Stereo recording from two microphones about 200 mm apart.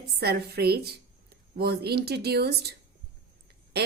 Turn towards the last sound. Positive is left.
turn(degrees=-55)  # may be behind; listen again after turning